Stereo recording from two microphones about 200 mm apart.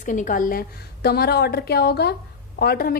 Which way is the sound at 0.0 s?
40° left (ahead or behind).